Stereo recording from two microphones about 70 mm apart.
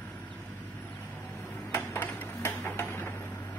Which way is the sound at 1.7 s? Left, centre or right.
Left.